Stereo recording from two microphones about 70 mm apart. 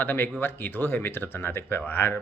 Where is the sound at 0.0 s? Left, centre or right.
Left.